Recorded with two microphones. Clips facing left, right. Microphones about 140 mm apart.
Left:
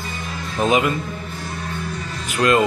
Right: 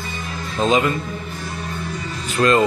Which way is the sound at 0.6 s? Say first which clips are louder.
Even; 15° left (ahead or behind).